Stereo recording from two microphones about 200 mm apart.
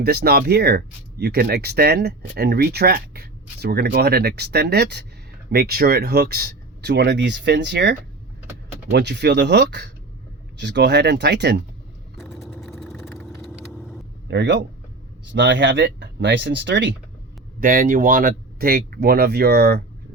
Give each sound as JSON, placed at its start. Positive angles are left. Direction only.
{"t": 0.0, "sound": "speech", "side_deg": -50}
{"t": 12.1, "sound": "vehicle", "side_deg": 0}
{"t": 14.3, "sound": "speech", "side_deg": -60}
{"t": 17.6, "sound": "speech", "side_deg": -45}